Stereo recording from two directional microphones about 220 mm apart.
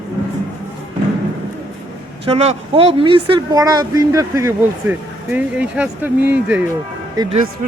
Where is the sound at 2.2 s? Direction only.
25° right (ahead or behind); by 6.6 s 10° right (ahead or behind).